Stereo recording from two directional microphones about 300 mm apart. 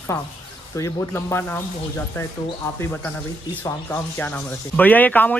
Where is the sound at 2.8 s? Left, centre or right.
Centre.